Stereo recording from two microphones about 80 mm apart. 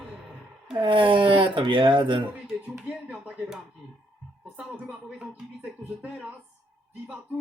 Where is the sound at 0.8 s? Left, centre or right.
Right.